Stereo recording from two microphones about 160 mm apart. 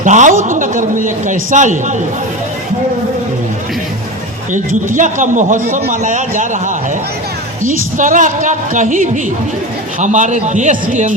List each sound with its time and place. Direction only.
0.0 s a man's voice: 50° right (ahead or behind)
4.5 s a man's voice: 55° right (ahead or behind)